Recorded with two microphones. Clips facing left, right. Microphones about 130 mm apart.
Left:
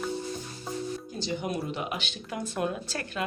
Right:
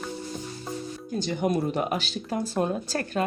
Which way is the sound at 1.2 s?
50° right (ahead or behind).